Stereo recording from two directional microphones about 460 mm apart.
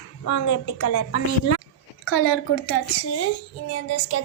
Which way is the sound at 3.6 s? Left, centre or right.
Left.